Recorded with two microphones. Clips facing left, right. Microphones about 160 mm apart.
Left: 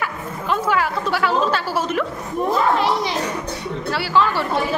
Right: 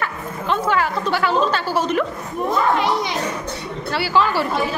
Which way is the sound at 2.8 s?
30° left (ahead or behind).